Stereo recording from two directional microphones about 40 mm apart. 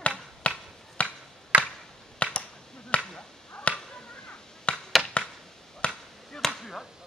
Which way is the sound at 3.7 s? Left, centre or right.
Left.